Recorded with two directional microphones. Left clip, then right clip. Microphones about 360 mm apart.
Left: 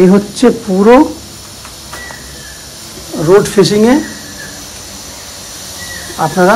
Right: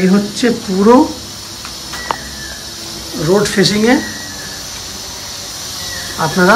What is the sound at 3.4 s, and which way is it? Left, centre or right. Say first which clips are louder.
Speech: left 4 dB; centre.